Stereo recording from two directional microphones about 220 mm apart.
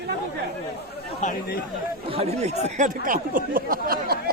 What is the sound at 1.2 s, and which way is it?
Speech, 40° left (ahead or behind).